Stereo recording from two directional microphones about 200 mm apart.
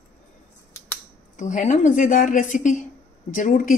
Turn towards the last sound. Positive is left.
turn(degrees=40)  # may be behind; listen again after turning